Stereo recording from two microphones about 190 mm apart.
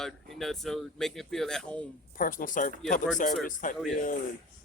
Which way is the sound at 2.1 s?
45° left (ahead or behind).